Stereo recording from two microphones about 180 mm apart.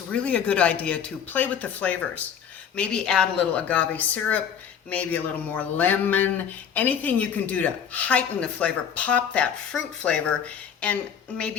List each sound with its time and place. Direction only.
0.1 s speech: 5° left (ahead or behind)